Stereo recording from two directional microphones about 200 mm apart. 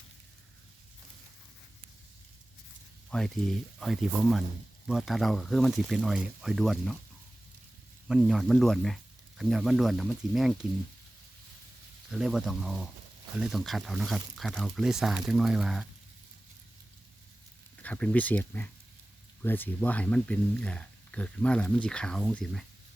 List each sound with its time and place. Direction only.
3.1 s speech: centre (ahead or behind)
8.0 s speech: 5° right (ahead or behind)
12.1 s speech: centre (ahead or behind)
17.8 s speech: 5° left (ahead or behind)